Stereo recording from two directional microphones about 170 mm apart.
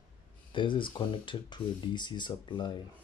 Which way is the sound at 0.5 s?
30° left (ahead or behind).